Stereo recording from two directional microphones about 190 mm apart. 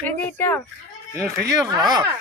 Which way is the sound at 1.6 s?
20° right (ahead or behind).